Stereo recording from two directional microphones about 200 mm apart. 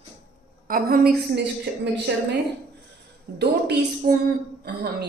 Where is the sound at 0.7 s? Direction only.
50° right (ahead or behind).